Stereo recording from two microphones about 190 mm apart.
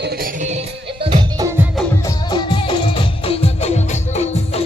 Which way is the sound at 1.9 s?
15° left (ahead or behind).